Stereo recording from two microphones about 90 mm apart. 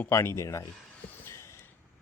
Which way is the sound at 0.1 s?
35° left (ahead or behind).